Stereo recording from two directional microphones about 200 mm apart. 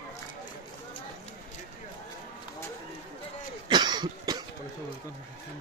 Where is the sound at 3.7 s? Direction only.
20° right (ahead or behind).